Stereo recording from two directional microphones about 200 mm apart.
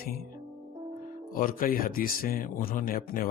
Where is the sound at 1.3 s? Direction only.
45° left (ahead or behind).